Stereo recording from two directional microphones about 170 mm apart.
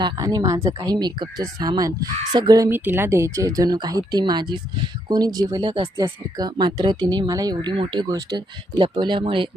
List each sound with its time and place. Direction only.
0.0 s speech: 20° right (ahead or behind)